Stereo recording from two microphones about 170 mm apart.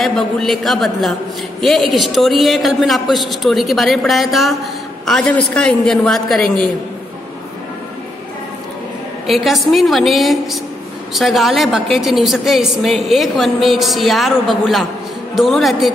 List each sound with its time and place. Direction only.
0.0 s a woman's voice: centre (ahead or behind)
9.3 s a woman's voice: centre (ahead or behind)